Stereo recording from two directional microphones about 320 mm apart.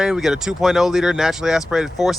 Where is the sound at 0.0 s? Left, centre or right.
Centre.